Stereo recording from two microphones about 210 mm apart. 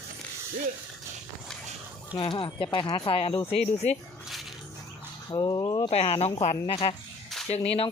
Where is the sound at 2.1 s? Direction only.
20° left (ahead or behind).